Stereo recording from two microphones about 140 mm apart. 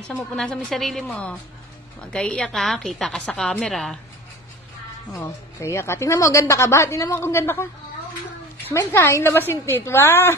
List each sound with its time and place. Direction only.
0.1 s a woman's voice: 5° left (ahead or behind)
5.1 s speech: 20° left (ahead or behind)
8.6 s a woman's voice: 15° left (ahead or behind)